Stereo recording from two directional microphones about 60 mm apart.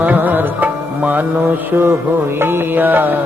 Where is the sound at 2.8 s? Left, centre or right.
Right.